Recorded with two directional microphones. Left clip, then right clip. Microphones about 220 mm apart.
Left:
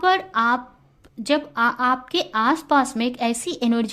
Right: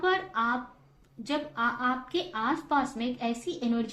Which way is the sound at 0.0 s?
45° left (ahead or behind).